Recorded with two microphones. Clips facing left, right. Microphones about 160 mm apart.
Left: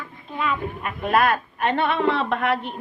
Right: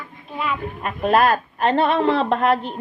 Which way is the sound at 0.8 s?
30° right (ahead or behind).